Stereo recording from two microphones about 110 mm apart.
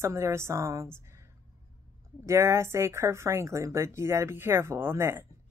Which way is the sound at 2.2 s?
25° right (ahead or behind).